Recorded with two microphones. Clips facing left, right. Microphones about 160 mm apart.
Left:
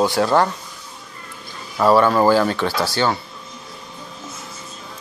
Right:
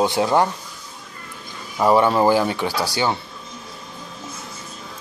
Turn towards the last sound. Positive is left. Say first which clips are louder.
# left 2 dB
turn(degrees=-15)  # may be behind; listen again after turning